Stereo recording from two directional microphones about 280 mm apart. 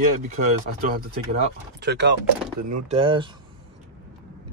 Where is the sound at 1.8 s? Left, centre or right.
Right.